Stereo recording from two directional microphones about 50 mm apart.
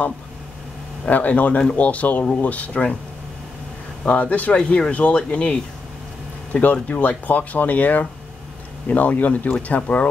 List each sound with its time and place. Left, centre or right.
1.0 s speech: left
4.0 s speech: left
4.6 s speech: left